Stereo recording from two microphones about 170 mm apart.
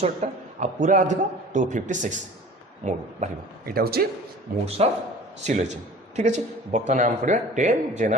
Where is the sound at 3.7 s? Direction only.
65° right (ahead or behind).